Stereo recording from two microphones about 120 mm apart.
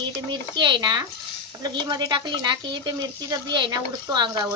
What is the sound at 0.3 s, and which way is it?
Speech, 40° right (ahead or behind).